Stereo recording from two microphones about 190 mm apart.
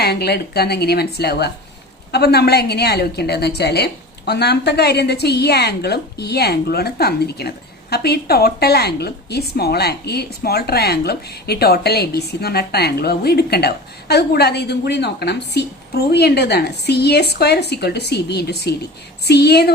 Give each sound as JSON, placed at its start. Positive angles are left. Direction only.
{"t": 0.0, "sound": "a woman's voice", "side_deg": 60}